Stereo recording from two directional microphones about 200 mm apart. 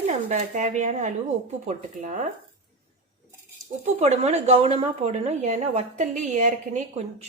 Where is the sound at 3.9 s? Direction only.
35° right (ahead or behind).